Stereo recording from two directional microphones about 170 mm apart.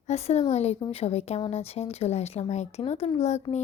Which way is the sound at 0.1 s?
40° left (ahead or behind).